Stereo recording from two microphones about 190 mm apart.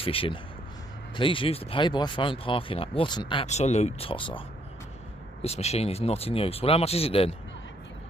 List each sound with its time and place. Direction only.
0.0 s speech: 30° left (ahead or behind)
3.4 s speech: 35° left (ahead or behind)
5.4 s speech: 35° left (ahead or behind)